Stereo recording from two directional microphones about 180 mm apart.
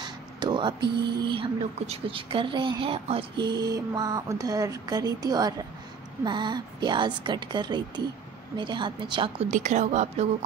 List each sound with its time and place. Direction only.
0.0 s a sound: 25° right (ahead or behind)
0.7 s speech: 70° right (ahead or behind)
1.2 s a woman's voice: 30° right (ahead or behind)
9.5 s a woman's voice: 45° right (ahead or behind)